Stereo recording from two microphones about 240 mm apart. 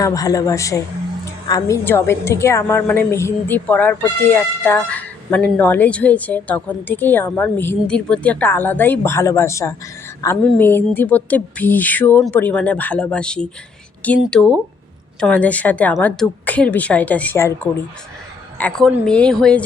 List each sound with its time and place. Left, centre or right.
0.0 s a woman's voice: centre
18.5 s a woman's voice: centre